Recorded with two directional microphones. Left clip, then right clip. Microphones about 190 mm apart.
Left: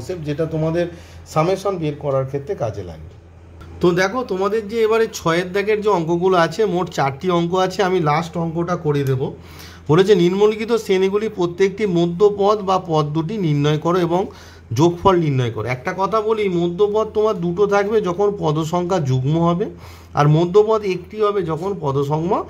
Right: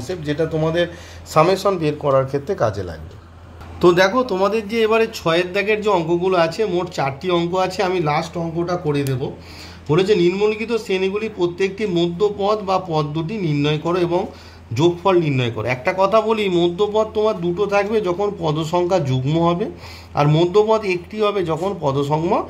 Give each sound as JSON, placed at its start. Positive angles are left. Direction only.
{"t": 0.0, "sound": "speech", "side_deg": 20}
{"t": 1.3, "sound": "speech", "side_deg": 5}
{"t": 3.8, "sound": "a man's voice", "side_deg": 25}